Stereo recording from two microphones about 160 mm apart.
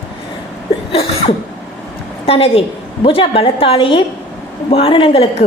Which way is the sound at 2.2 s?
35° left (ahead or behind).